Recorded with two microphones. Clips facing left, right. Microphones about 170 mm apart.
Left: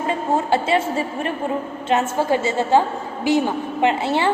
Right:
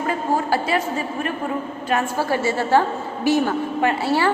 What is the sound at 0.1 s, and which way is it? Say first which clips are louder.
A woman's voice: left 2 dB; 25° left (ahead or behind).